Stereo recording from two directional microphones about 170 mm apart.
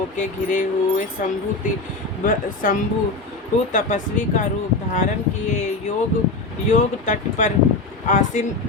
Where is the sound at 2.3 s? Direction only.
50° left (ahead or behind).